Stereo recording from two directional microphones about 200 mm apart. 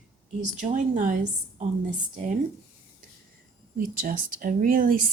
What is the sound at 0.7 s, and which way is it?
Speech, 40° right (ahead or behind).